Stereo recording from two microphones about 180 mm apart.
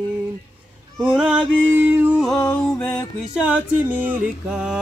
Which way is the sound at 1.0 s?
5° right (ahead or behind).